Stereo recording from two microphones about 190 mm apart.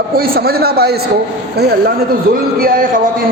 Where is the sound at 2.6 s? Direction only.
50° right (ahead or behind).